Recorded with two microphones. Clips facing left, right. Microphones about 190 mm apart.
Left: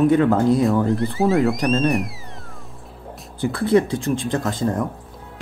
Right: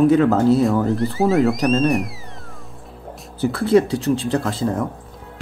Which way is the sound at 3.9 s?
35° right (ahead or behind).